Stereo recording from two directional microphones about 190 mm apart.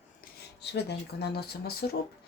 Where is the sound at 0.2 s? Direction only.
60° left (ahead or behind).